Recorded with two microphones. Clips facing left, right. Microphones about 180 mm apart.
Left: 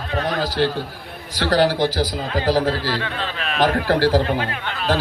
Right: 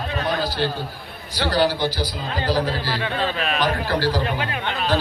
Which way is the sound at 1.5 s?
90° left.